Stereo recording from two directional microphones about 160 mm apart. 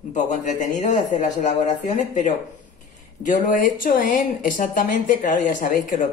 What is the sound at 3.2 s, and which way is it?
Speech, 55° left (ahead or behind).